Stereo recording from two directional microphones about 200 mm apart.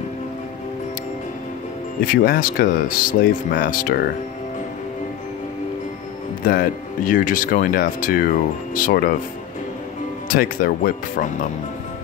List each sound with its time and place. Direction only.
2.2 s speech: 45° left (ahead or behind)
6.4 s speech: 45° left (ahead or behind)
10.2 s speech: 45° left (ahead or behind)